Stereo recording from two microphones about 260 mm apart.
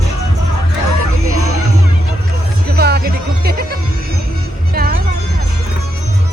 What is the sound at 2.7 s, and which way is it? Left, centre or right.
Music, right.